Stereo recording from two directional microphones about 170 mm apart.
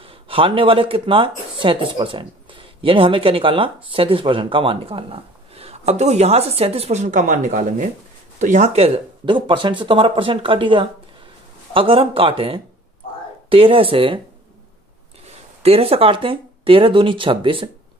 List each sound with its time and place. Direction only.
0.0 s speech: 30° right (ahead or behind)
15.6 s speech: 35° right (ahead or behind)